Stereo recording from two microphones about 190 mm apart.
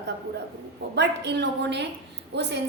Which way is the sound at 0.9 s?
65° right (ahead or behind).